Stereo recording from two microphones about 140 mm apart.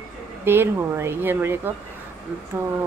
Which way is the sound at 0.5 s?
15° right (ahead or behind).